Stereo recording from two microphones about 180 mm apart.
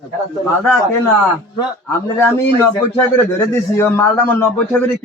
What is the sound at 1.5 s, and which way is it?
Speech, 20° left (ahead or behind).